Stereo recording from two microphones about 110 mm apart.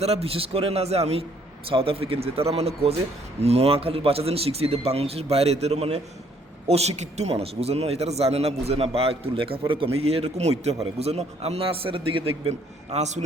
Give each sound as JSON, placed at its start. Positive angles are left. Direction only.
{"t": 0.0, "sound": "speech", "side_deg": -70}
{"t": 1.6, "sound": "a man's voice", "side_deg": -55}